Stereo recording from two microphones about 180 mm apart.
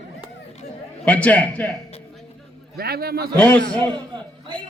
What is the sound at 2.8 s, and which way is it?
Speech, 60° right (ahead or behind).